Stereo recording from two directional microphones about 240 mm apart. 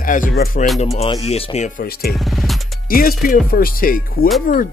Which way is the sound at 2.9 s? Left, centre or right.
Left.